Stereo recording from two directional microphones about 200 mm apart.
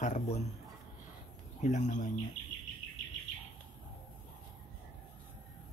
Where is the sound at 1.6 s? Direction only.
35° left (ahead or behind).